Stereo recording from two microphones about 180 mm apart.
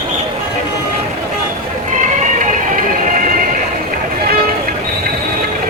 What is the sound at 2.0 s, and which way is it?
Music, 45° right (ahead or behind).